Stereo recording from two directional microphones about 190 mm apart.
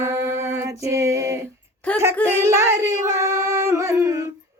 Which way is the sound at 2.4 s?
15° right (ahead or behind).